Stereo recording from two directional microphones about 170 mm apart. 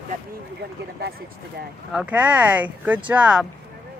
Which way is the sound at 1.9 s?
10° right (ahead or behind).